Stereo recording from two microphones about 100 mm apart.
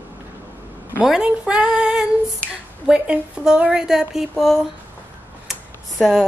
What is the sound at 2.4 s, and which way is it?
Speech, 15° left (ahead or behind).